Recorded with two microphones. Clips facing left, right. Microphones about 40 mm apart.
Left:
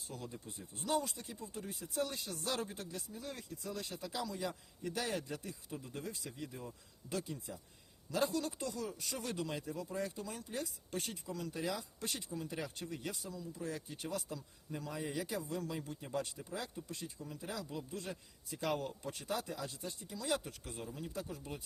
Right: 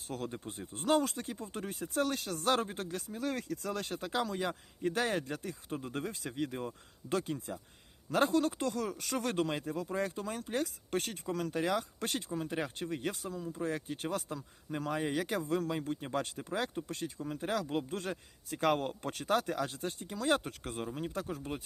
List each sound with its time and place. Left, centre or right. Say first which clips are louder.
0.1 s speech: right 8 dB; right